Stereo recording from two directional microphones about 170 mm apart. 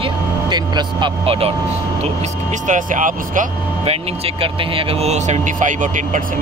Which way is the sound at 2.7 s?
50° right (ahead or behind).